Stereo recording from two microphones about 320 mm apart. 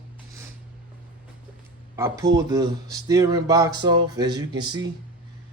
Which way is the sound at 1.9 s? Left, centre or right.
Centre.